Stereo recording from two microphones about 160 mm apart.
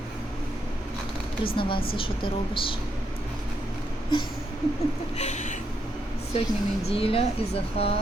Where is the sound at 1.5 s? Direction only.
30° left (ahead or behind).